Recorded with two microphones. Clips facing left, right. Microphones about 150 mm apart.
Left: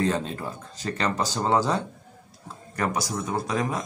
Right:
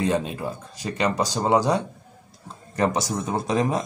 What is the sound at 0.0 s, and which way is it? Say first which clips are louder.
A man's voice: right 2 dB; 15° right (ahead or behind).